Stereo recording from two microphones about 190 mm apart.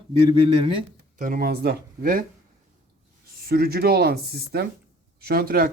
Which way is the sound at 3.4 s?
55° right (ahead or behind).